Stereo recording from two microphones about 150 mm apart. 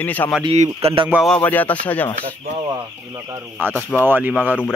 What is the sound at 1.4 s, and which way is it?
Speech, 10° left (ahead or behind).